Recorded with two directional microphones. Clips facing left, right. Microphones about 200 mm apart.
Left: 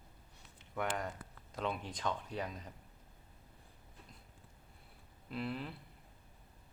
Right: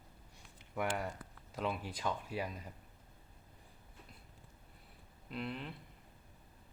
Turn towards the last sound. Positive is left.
turn(degrees=0)  # may be behind; listen again after turning